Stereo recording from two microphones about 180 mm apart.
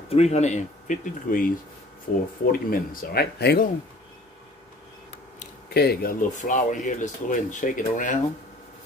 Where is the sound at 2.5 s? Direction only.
55° left (ahead or behind).